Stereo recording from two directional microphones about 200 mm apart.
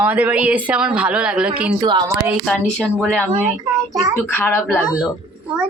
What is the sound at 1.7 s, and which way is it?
Speech, 20° right (ahead or behind).